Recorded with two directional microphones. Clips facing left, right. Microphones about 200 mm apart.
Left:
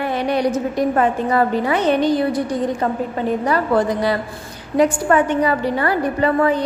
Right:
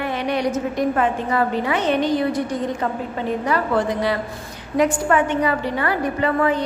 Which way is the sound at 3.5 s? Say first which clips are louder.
Left 2 dB; 40° left (ahead or behind).